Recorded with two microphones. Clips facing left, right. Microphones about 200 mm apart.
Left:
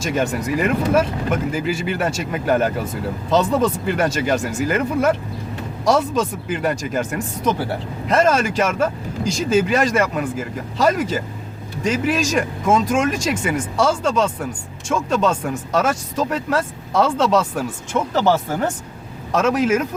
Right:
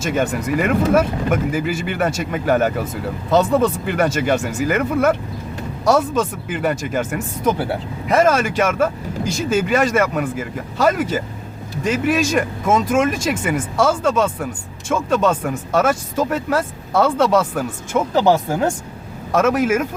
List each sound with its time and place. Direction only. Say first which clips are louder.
0.1 s speech: right 1 dB; 5° right (ahead or behind)